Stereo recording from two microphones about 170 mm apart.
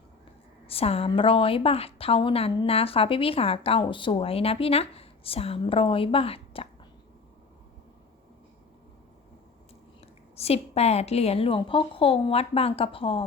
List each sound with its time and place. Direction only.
0.7 s a woman's voice: 35° left (ahead or behind)
10.3 s a woman's voice: 35° left (ahead or behind)